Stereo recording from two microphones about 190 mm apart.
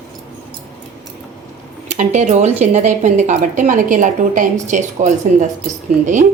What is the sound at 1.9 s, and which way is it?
Speech, 40° right (ahead or behind).